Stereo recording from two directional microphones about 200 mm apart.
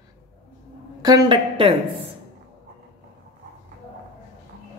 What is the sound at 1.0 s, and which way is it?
Speech, 20° right (ahead or behind).